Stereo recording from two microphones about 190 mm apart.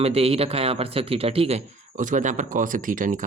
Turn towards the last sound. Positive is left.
turn(degrees=-45)  # may be behind; listen again after turning